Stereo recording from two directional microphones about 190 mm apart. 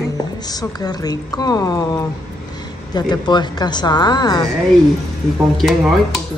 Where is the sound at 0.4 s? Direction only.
20° left (ahead or behind).